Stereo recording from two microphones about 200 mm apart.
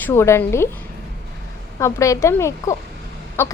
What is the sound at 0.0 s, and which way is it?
A woman's voice, 15° left (ahead or behind).